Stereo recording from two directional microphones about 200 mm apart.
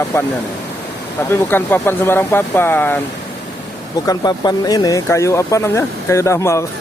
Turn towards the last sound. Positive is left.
turn(degrees=15)  # may be behind; listen again after turning